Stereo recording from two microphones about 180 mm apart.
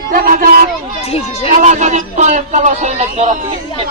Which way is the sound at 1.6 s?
40° right (ahead or behind).